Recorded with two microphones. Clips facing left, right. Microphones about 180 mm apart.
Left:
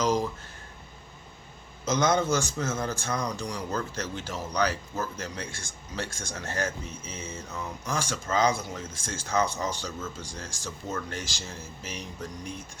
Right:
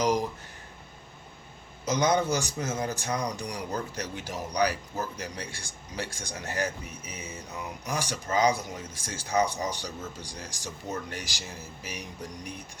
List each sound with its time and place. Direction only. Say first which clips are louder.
0.0 s speech: even; 15° right (ahead or behind)
1.8 s speech: even; 15° right (ahead or behind)